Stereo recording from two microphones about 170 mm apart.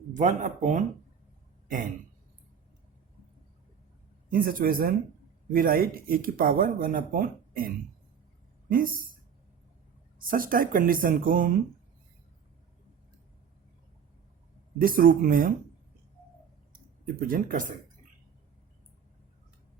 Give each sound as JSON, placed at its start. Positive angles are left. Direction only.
{"t": 0.1, "sound": "speech", "side_deg": -45}
{"t": 1.6, "sound": "a sound", "side_deg": -50}
{"t": 4.3, "sound": "speech", "side_deg": -55}
{"t": 8.7, "sound": "speech", "side_deg": -55}
{"t": 10.2, "sound": "speech", "side_deg": -55}
{"t": 14.8, "sound": "speech", "side_deg": -55}
{"t": 17.2, "sound": "speech", "side_deg": -55}